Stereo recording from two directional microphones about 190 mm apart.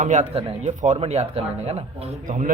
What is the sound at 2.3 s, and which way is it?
Speech, 45° right (ahead or behind).